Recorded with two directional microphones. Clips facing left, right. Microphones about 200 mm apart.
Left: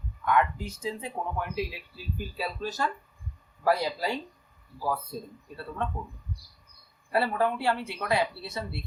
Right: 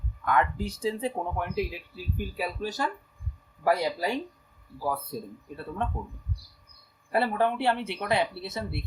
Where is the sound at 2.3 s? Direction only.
15° right (ahead or behind).